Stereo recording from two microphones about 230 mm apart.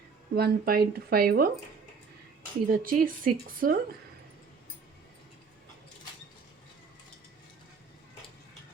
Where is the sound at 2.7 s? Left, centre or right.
Right.